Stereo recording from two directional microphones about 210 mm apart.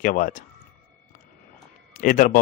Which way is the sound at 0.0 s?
40° left (ahead or behind).